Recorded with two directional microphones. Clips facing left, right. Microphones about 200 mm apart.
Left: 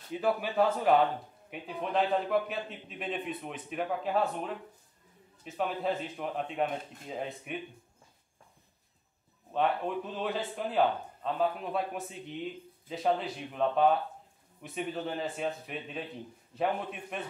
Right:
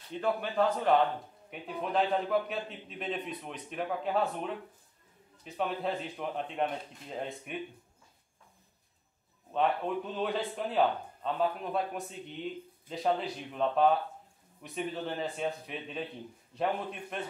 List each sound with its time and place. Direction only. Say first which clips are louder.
0.1 s a man's voice: left 2 dB; 5° left (ahead or behind)
9.5 s a man's voice: even; centre (ahead or behind)